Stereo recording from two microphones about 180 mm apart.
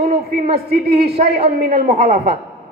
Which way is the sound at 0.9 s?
35° right (ahead or behind).